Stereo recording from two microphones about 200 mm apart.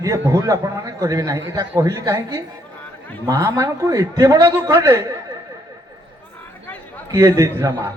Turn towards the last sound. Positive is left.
turn(degrees=-15)  # may be behind; listen again after turning